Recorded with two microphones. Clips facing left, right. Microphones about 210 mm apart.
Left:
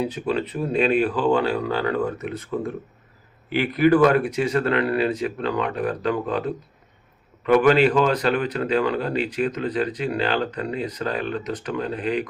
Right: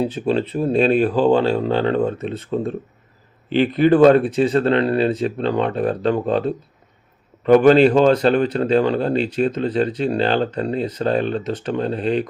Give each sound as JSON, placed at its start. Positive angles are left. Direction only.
{"t": 0.0, "sound": "speech", "side_deg": -30}